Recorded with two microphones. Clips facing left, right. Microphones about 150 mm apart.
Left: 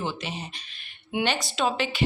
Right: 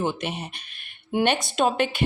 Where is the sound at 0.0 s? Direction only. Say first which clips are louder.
Right 5 dB; 55° right (ahead or behind).